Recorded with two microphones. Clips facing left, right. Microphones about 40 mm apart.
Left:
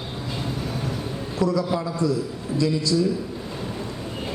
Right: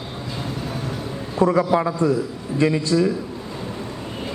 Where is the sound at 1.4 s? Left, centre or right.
Right.